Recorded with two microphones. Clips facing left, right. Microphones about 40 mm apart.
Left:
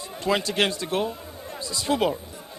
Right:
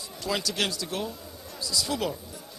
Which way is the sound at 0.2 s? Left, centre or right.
Left.